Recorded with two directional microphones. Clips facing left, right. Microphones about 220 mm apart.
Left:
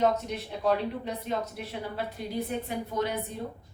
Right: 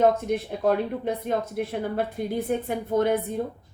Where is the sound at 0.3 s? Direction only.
50° right (ahead or behind).